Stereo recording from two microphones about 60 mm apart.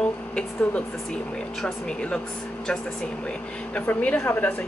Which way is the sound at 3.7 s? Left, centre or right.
Left.